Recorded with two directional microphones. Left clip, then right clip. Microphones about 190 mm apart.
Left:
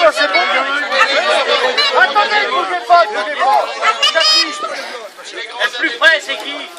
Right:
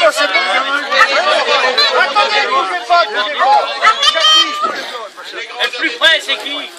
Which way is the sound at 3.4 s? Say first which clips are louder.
Right 2 dB; 20° left (ahead or behind).